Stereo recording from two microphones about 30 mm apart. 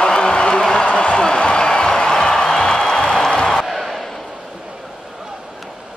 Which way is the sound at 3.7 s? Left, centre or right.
Centre.